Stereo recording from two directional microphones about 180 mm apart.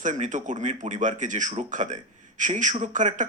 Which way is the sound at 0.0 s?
45° right (ahead or behind).